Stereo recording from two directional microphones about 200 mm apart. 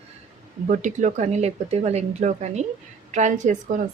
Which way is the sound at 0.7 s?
40° right (ahead or behind).